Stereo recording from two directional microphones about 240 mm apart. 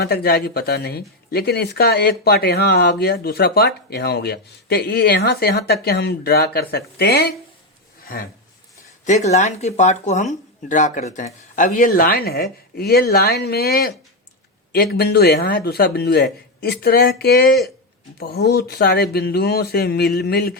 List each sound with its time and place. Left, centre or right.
0.0 s speech: left
9.0 s speech: left